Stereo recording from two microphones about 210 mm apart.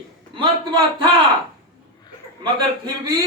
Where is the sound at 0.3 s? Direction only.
25° right (ahead or behind).